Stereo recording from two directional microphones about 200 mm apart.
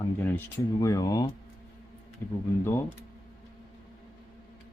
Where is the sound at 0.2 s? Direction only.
10° left (ahead or behind).